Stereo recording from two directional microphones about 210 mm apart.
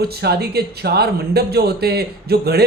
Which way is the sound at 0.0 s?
50° right (ahead or behind).